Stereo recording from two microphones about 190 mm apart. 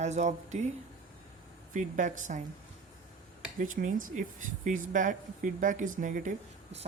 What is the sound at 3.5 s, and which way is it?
Speech, 45° right (ahead or behind).